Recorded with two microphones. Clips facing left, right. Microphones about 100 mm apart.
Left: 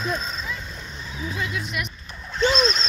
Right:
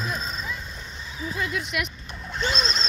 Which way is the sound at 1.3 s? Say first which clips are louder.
Right 1 dB; 45° right (ahead or behind).